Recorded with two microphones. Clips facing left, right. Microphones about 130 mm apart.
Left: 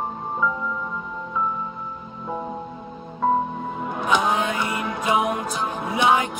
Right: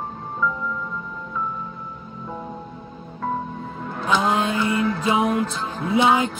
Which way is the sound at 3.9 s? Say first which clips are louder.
Right 1 dB; 20° left (ahead or behind).